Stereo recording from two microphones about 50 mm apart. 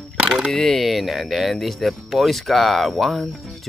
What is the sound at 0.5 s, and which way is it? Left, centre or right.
Speech, centre.